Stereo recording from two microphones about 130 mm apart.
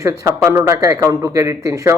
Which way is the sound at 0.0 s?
25° right (ahead or behind).